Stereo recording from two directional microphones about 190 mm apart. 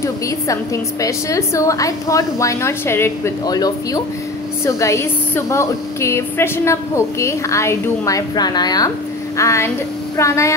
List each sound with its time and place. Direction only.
1.0 s a woman's voice: 15° left (ahead or behind)